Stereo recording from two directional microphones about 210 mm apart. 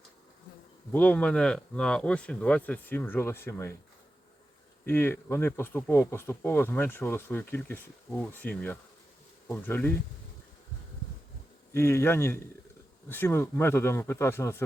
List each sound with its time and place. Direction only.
0.9 s speech: 5° left (ahead or behind)
4.9 s speech: 10° left (ahead or behind)
11.7 s speech: 10° left (ahead or behind)